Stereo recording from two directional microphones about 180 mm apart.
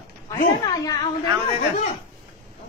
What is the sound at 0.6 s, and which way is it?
Speech, 20° left (ahead or behind).